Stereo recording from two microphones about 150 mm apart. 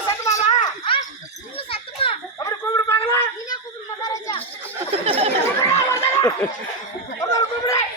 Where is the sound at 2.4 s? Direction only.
20° left (ahead or behind).